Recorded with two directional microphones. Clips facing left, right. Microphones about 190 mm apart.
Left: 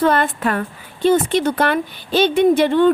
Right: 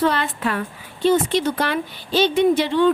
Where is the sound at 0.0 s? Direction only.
50° left (ahead or behind).